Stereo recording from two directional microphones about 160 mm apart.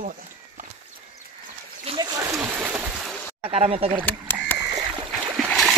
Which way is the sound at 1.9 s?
35° right (ahead or behind).